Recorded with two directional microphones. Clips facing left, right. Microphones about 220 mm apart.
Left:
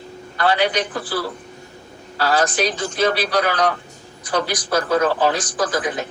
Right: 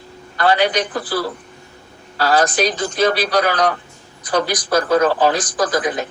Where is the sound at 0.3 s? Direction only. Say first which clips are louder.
Right 2 dB; 40° right (ahead or behind).